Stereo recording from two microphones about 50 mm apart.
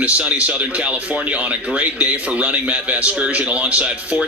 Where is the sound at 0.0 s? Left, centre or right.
Right.